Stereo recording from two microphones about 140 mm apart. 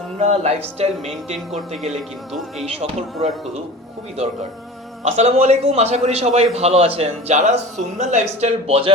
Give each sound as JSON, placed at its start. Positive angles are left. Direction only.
{"t": 0.2, "sound": "a man's voice", "side_deg": -50}
{"t": 1.5, "sound": "speech", "side_deg": 0}
{"t": 2.6, "sound": "a man's voice", "side_deg": -45}
{"t": 5.0, "sound": "a man's voice", "side_deg": -50}